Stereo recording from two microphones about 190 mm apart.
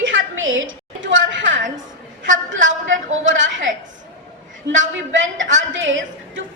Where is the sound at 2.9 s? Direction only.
80° right.